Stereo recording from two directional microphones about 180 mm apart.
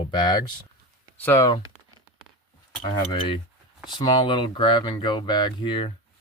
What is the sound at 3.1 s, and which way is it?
Speech, 25° left (ahead or behind).